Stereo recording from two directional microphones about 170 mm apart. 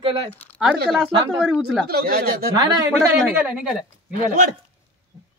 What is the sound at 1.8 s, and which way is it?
Speech, 65° right (ahead or behind).